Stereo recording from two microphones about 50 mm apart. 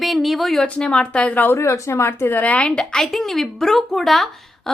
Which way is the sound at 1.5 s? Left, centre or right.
Left.